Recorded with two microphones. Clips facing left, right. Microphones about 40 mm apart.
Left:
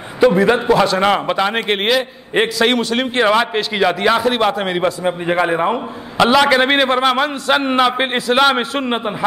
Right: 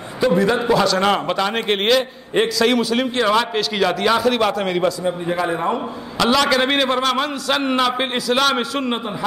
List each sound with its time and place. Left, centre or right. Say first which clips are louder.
0.7 s a man's voice: left 3 dB; left
2.3 s a man's voice: left 2 dB; left